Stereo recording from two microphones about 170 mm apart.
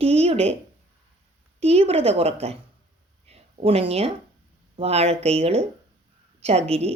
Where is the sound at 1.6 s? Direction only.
35° right (ahead or behind).